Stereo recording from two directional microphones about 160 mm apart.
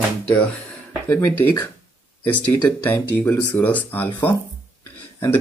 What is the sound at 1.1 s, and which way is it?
Speech, 15° left (ahead or behind).